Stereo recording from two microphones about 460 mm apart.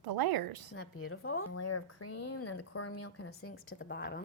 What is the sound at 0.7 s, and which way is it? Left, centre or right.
A woman's voice, left.